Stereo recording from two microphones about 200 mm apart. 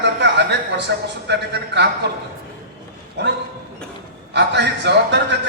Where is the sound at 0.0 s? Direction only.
60° right (ahead or behind).